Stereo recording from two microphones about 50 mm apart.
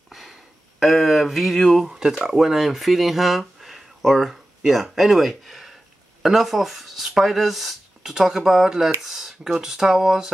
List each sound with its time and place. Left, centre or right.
0.7 s speech: centre